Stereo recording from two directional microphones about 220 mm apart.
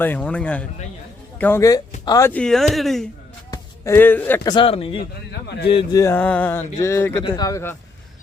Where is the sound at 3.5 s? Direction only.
10° left (ahead or behind).